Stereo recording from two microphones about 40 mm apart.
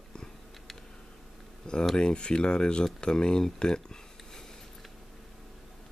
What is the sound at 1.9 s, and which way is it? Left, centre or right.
Speech, left.